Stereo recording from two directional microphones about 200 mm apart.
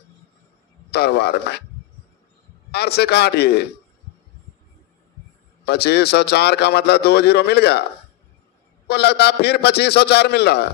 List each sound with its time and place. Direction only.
0.8 s a man's voice: 55° left (ahead or behind)
2.7 s a man's voice: 55° left (ahead or behind)
5.7 s a man's voice: 55° left (ahead or behind)
8.8 s a man's voice: 55° left (ahead or behind)